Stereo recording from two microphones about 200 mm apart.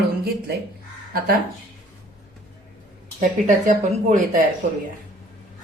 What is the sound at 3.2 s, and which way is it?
Speech, 40° right (ahead or behind).